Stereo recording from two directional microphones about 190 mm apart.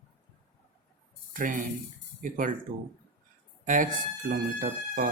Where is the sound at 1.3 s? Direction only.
45° right (ahead or behind).